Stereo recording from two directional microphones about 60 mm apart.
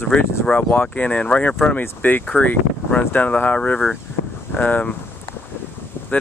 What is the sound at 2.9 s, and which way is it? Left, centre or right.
Speech, left.